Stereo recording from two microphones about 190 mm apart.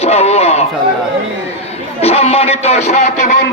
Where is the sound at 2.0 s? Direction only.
35° left (ahead or behind).